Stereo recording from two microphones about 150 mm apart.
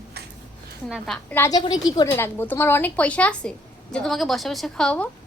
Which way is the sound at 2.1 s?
15° left (ahead or behind).